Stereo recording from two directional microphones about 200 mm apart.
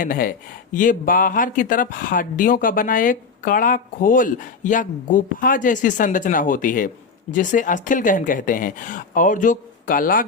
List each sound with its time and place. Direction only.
0.0 s speech: 45° left (ahead or behind)